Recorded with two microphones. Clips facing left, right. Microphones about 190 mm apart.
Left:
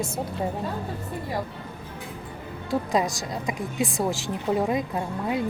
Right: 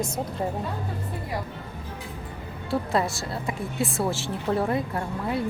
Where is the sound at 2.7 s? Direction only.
15° left (ahead or behind).